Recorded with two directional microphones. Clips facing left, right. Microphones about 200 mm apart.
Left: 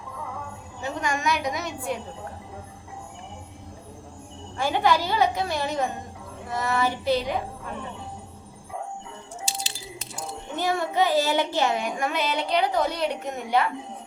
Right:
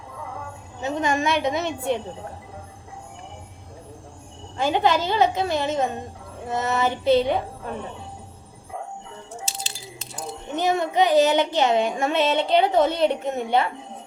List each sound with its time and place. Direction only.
0.8 s a woman's voice: 25° right (ahead or behind)
4.5 s a child's voice: 20° right (ahead or behind)
10.5 s a child's voice: 20° right (ahead or behind)